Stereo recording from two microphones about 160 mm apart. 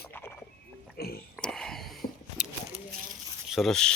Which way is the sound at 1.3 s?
5° left (ahead or behind).